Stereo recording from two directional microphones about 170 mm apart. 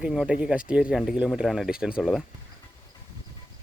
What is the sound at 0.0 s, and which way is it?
Speech, 5° right (ahead or behind).